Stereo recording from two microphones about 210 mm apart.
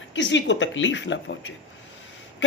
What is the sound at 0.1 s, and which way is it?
A man's voice, 60° left (ahead or behind).